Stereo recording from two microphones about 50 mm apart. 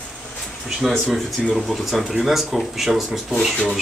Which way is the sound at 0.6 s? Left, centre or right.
Centre.